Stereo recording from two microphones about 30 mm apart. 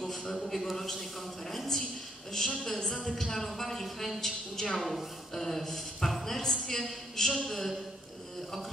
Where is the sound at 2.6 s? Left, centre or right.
Centre.